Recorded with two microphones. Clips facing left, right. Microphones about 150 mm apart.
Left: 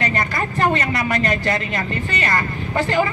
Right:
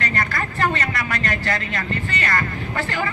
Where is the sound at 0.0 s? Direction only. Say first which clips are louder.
Left 3 dB; 20° left (ahead or behind).